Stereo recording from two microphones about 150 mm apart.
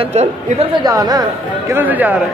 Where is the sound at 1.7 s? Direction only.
10° right (ahead or behind).